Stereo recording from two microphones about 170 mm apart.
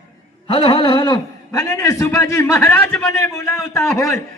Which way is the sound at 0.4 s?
35° left (ahead or behind).